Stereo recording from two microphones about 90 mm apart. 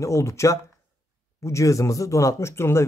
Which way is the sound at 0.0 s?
35° left (ahead or behind).